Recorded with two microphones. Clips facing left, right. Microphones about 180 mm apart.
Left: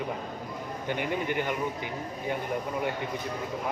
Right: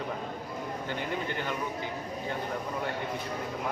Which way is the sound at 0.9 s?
15° left (ahead or behind).